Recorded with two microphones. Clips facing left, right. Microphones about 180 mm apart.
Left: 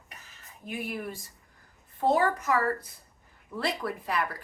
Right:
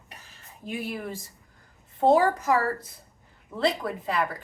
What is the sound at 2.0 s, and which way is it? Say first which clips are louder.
A woman's voice: right 5 dB; 30° right (ahead or behind).